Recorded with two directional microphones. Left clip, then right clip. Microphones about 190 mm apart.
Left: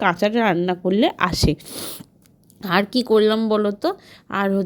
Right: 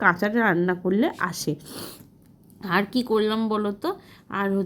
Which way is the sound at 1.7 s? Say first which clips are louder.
Left 5 dB; 25° left (ahead or behind).